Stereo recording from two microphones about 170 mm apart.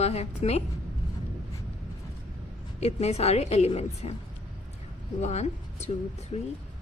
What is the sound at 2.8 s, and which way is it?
A woman's voice, 40° left (ahead or behind).